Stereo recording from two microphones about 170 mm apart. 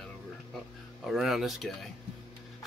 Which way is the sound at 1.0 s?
Centre (ahead or behind).